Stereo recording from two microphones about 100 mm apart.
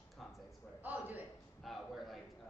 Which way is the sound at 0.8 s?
15° right (ahead or behind).